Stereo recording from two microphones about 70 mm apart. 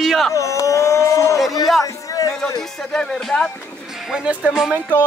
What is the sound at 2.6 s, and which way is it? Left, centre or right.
Speech, centre.